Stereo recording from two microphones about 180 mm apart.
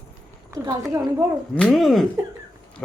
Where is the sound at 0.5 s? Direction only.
15° right (ahead or behind).